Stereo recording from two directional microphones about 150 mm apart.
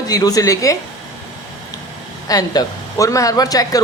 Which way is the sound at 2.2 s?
25° left (ahead or behind).